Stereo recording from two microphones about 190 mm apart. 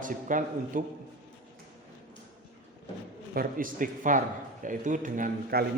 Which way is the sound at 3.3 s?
50° right (ahead or behind).